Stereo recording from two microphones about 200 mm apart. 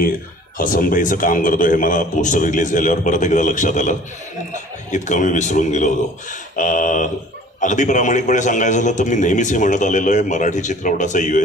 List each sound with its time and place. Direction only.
0.6 s a man's voice: 45° left (ahead or behind)
4.9 s a man's voice: 40° left (ahead or behind)